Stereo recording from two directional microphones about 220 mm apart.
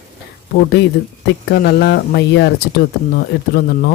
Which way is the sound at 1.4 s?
50° left (ahead or behind).